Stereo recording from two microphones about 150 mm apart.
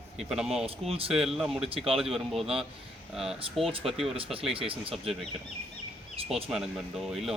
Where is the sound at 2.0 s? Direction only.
Centre (ahead or behind).